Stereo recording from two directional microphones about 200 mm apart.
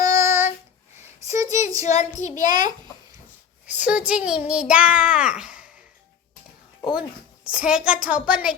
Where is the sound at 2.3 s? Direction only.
20° right (ahead or behind).